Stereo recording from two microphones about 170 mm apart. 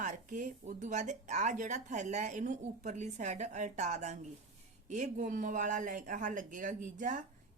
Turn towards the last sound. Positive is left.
turn(degrees=-50)  # may be behind; listen again after turning